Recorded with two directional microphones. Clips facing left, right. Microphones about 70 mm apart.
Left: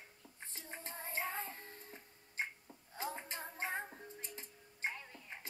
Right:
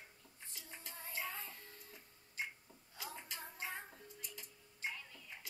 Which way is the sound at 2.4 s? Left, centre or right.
Left.